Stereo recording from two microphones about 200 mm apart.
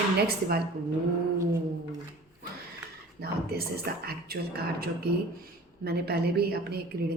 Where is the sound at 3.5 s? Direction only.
50° right (ahead or behind).